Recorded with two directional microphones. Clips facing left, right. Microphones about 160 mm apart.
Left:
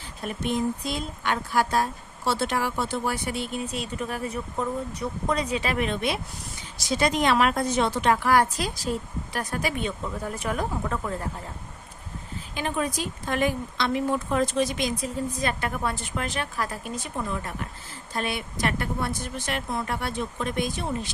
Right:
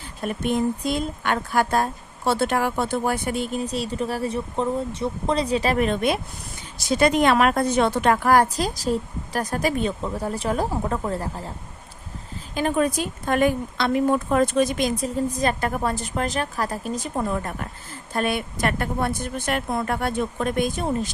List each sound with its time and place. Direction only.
0.3 s a woman's voice: 50° right (ahead or behind); by 11.5 s 35° right (ahead or behind)
12.5 s speech: 50° right (ahead or behind)